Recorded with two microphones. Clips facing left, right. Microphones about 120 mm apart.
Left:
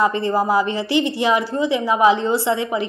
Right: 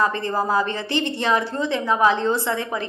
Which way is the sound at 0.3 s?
10° left (ahead or behind).